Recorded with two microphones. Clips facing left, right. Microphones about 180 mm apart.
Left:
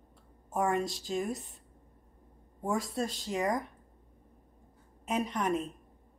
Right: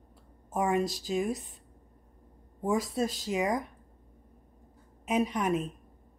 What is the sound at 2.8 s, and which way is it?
Speech, centre (ahead or behind).